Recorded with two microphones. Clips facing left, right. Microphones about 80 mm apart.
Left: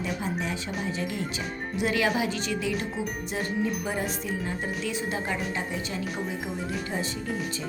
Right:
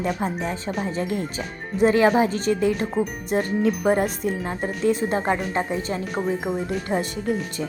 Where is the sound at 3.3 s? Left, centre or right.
Right.